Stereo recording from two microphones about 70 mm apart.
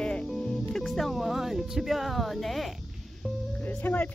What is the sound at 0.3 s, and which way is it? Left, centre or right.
Music, centre.